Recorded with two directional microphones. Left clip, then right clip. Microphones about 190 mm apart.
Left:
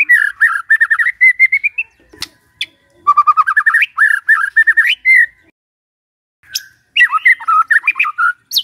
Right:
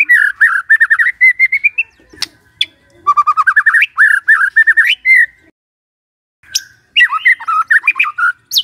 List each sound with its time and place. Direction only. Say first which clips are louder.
0.0 s bird: right 2 dB; centre (ahead or behind)
6.5 s bird: right 3 dB; centre (ahead or behind)